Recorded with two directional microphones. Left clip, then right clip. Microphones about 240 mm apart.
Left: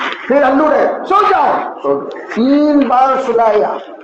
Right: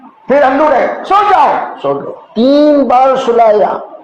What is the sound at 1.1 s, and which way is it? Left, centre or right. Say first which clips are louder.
Speech: right 3 dB; right.